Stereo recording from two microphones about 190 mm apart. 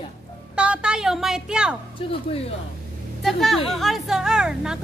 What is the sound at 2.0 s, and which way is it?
Speech, 30° left (ahead or behind).